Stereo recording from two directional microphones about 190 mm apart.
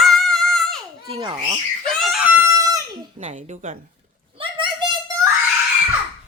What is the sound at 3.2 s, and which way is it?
Speech, 40° right (ahead or behind).